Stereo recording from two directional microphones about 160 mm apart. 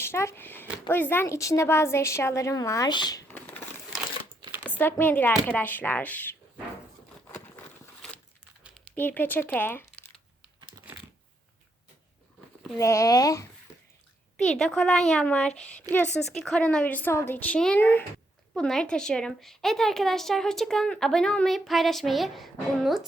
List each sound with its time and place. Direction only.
0.0 s a woman's voice: 15° left (ahead or behind)
3.2 s a sound: 10° left (ahead or behind)
4.7 s a woman's voice: 10° left (ahead or behind)
7.3 s a sound: 15° left (ahead or behind)
9.0 s a woman's voice: 10° left (ahead or behind)
12.8 s speech: 20° left (ahead or behind)
14.3 s a woman's voice: 5° left (ahead or behind)